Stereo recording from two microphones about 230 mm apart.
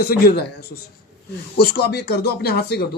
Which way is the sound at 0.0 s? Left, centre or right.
Left.